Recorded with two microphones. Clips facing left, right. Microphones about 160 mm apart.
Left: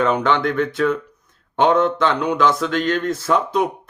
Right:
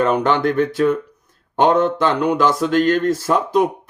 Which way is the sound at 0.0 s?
45° right (ahead or behind).